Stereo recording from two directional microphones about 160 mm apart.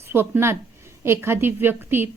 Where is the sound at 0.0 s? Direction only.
15° right (ahead or behind).